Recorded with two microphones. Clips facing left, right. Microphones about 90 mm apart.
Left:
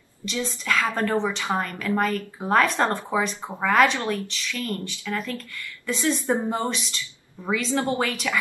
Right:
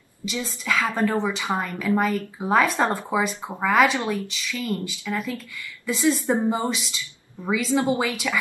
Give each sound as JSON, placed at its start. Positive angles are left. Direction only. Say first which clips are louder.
{"t": 0.2, "sound": "a woman's voice", "louder": "left 1 dB", "side_deg": -5}
{"t": 5.9, "sound": "a woman's voice", "louder": "right 3 dB", "side_deg": -5}
{"t": 6.3, "sound": "speech", "louder": "right 2 dB", "side_deg": -15}
{"t": 6.7, "sound": "a woman's voice", "louder": "right 2 dB", "side_deg": -5}